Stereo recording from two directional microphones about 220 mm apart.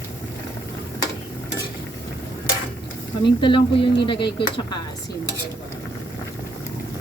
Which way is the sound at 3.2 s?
20° left (ahead or behind).